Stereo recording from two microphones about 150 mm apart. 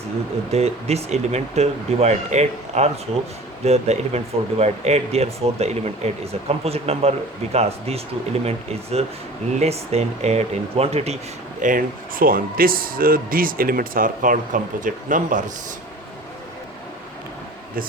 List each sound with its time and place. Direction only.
0.5 s speech: 45° right (ahead or behind)
11.6 s speech: 65° right (ahead or behind)